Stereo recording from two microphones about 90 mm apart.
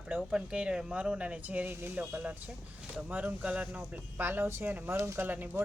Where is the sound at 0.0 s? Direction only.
5° right (ahead or behind).